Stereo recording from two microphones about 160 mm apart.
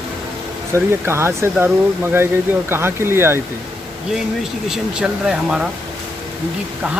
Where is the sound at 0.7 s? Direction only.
15° right (ahead or behind).